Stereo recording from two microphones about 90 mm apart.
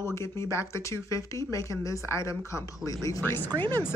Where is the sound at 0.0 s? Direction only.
30° left (ahead or behind).